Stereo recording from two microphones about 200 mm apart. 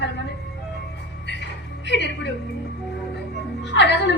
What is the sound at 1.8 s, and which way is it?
Speech, 60° left (ahead or behind).